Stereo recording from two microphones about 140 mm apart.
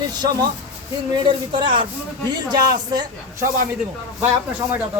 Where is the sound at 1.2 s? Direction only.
35° right (ahead or behind).